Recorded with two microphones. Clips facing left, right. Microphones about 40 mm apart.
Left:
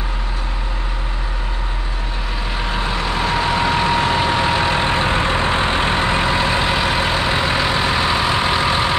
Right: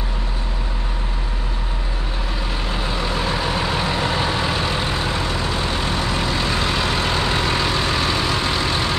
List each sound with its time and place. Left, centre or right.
2.8 s vehicle: centre